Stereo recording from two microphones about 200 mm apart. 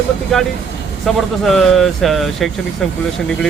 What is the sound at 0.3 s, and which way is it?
Speech, centre (ahead or behind).